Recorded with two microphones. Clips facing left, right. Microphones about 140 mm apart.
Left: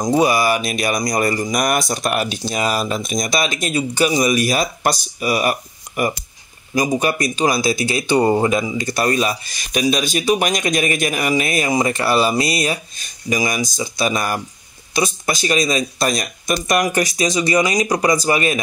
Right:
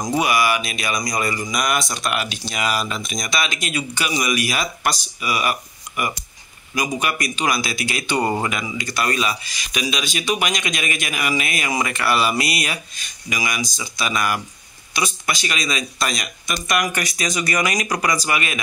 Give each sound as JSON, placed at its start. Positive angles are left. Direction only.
{"t": 0.0, "sound": "speech", "side_deg": 30}